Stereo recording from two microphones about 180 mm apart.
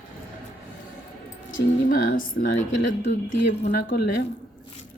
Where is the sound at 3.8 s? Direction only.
60° left (ahead or behind).